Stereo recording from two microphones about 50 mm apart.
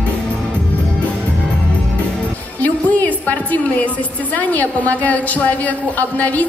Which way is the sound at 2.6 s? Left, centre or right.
Left.